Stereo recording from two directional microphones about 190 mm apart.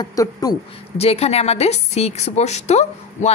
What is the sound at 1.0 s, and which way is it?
A woman's voice, 35° left (ahead or behind).